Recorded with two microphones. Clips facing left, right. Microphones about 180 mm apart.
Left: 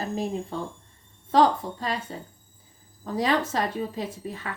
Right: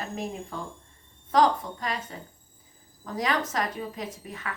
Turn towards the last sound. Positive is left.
turn(degrees=30)  # may be behind; listen again after turning